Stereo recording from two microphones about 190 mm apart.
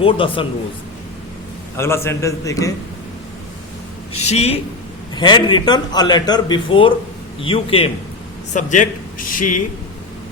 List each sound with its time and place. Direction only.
0.0 s a man's voice: 25° left (ahead or behind)
1.7 s a man's voice: 15° left (ahead or behind)
4.2 s a man's voice: 35° left (ahead or behind)
8.5 s a man's voice: 40° left (ahead or behind)